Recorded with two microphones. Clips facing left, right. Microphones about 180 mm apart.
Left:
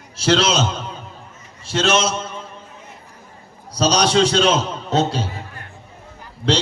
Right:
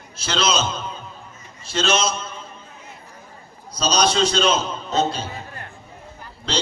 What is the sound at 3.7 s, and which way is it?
A man's voice, 75° left (ahead or behind).